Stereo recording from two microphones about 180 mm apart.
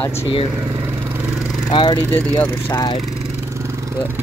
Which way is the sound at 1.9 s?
10° left (ahead or behind).